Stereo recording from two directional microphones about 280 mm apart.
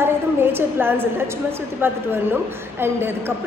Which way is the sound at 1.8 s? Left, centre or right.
Centre.